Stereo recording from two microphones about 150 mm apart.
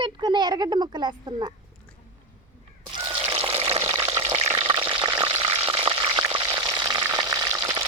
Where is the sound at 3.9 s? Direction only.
20° right (ahead or behind).